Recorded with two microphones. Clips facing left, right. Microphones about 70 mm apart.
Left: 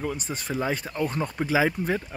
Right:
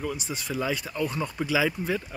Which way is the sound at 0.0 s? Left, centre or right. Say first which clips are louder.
Left 1 dB; left.